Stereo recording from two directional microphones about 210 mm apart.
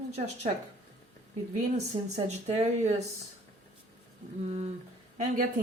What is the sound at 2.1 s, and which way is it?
Speech, 30° right (ahead or behind).